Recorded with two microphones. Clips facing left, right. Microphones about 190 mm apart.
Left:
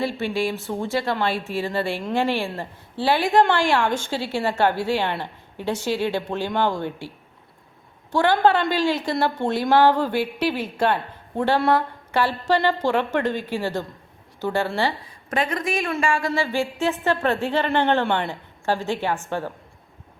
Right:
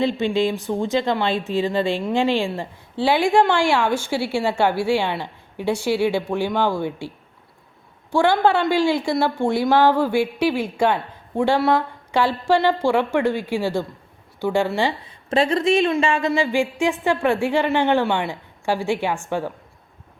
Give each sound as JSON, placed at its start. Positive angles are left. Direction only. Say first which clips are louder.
{"t": 0.0, "sound": "speech", "louder": "right 4 dB", "side_deg": -20}
{"t": 8.1, "sound": "speech", "louder": "right 1 dB", "side_deg": -10}
{"t": 15.3, "sound": "speech", "louder": "right 6 dB", "side_deg": -30}